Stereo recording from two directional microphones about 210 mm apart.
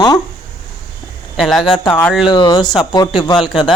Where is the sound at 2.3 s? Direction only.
20° left (ahead or behind).